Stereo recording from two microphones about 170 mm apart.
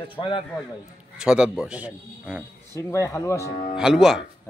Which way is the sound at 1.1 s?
5° right (ahead or behind).